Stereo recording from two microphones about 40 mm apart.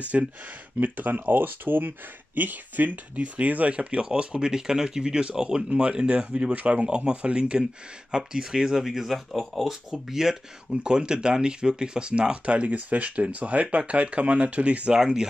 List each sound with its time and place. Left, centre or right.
0.1 s speech: right
0.7 s speech: right; by 5.7 s centre
5.7 s speech: right; by 9.2 s centre
9.3 s speech: centre
9.7 s speech: centre
10.8 s speech: right
15.0 s speech: centre